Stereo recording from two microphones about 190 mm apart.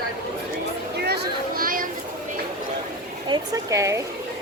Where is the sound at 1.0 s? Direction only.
55° right (ahead or behind).